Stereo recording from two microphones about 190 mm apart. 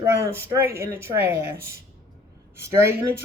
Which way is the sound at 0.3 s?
15° right (ahead or behind).